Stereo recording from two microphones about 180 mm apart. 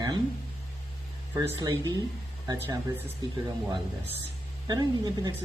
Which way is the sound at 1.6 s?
25° right (ahead or behind).